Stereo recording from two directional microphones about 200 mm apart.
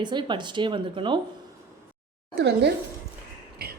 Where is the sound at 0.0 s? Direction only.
20° right (ahead or behind).